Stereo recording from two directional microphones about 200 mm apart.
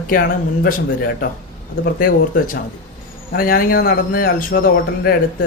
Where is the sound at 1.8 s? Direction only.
45° left (ahead or behind).